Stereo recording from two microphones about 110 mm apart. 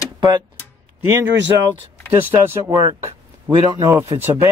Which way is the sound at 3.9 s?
20° right (ahead or behind).